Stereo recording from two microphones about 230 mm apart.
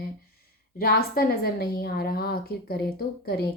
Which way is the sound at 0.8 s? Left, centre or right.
Left.